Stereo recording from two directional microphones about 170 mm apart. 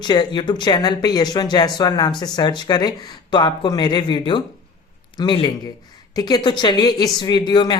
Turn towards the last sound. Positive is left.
turn(degrees=25)  # may be behind; listen again after turning